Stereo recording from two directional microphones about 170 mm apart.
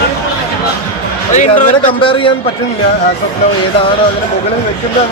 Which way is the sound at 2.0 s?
30° left (ahead or behind).